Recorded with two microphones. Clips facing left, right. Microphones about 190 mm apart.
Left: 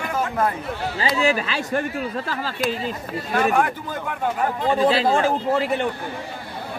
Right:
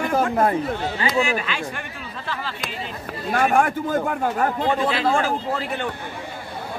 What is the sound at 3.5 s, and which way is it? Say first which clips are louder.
Speech: right 3 dB; 45° right (ahead or behind).